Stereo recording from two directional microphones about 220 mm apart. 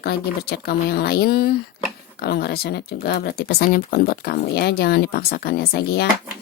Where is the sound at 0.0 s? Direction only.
45° left (ahead or behind).